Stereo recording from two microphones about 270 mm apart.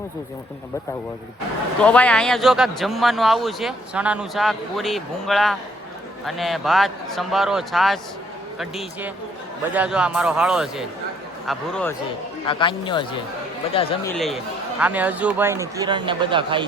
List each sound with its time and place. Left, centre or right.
1.8 s speech: centre
12.5 s speech: centre
14.2 s speech: centre